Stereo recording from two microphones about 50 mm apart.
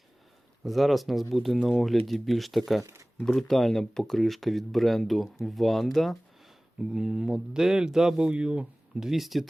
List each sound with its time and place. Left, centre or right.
0.6 s speech: centre
2.8 s a sound: right
3.2 s speech: centre
6.7 s speech: centre
9.0 s speech: centre